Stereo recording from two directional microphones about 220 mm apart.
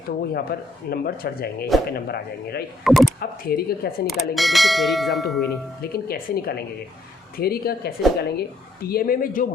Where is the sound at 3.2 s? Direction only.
40° left (ahead or behind).